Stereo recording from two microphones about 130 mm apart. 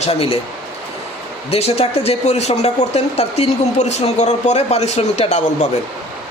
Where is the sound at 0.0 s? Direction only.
50° left (ahead or behind).